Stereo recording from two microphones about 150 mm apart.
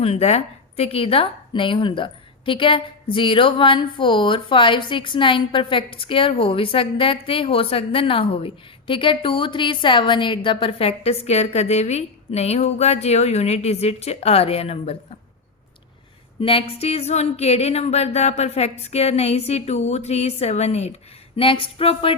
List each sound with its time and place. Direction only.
0.0 s a woman's voice: 45° left (ahead or behind)
16.4 s speech: 40° left (ahead or behind)